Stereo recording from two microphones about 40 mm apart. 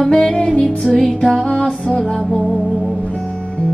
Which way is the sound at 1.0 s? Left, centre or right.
Centre.